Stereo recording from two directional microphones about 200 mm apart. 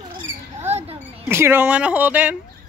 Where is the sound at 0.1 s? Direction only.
35° right (ahead or behind).